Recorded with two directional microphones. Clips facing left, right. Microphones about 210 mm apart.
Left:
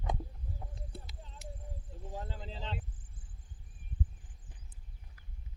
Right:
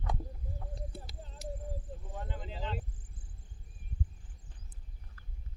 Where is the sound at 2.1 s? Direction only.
35° left (ahead or behind).